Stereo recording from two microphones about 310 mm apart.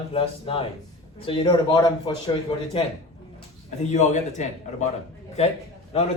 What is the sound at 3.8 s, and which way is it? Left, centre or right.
Speech, left.